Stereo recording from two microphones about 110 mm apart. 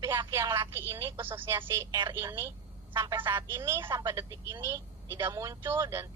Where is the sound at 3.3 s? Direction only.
25° right (ahead or behind).